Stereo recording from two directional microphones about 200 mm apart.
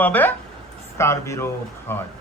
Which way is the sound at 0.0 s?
10° left (ahead or behind).